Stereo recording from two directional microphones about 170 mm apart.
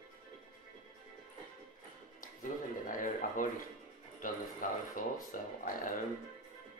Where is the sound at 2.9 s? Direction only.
50° left (ahead or behind).